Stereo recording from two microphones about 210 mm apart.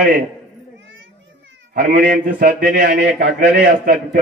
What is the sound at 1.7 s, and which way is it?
A man's voice, 40° right (ahead or behind).